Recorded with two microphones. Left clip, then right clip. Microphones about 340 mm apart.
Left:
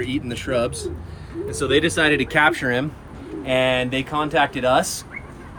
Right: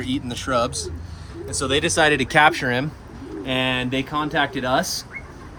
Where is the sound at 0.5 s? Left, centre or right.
Centre.